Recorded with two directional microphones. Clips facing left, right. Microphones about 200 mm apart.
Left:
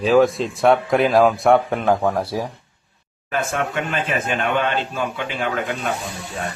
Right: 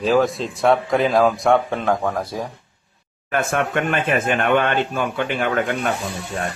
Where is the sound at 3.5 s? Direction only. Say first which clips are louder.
Right 3 dB; 60° right (ahead or behind).